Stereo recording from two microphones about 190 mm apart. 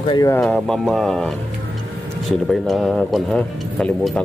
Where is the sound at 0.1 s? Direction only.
20° left (ahead or behind).